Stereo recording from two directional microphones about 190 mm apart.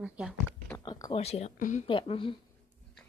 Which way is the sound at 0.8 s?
25° left (ahead or behind).